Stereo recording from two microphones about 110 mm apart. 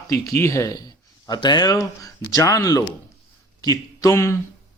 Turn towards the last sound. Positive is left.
turn(degrees=25)  # may be behind; listen again after turning